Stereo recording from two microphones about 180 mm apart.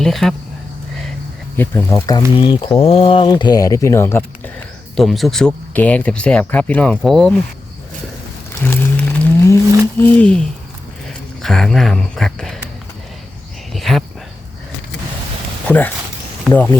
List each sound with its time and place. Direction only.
0.0 s speech: centre (ahead or behind)
1.5 s speech: 10° left (ahead or behind)
4.9 s speech: centre (ahead or behind)
8.6 s a sound: 10° left (ahead or behind)
10.0 s speech: 5° left (ahead or behind)
13.7 s a sound: centre (ahead or behind)
15.6 s speech: 10° left (ahead or behind)